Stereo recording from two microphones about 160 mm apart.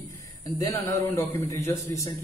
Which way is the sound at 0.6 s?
20° left (ahead or behind).